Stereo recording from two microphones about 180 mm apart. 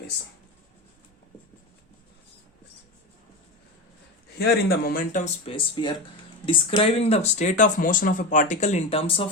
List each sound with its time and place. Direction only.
4.4 s speech: 55° left (ahead or behind)
5.5 s speech: 30° left (ahead or behind)